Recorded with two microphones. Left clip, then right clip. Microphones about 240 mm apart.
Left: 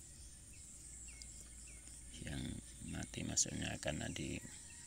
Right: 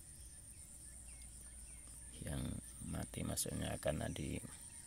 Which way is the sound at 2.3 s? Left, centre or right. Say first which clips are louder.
Right 1 dB; right.